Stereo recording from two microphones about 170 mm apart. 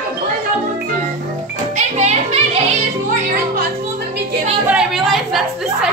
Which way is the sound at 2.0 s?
40° right (ahead or behind).